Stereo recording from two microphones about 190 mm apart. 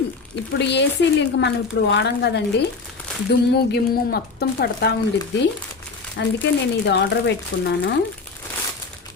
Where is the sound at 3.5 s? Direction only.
55° left (ahead or behind).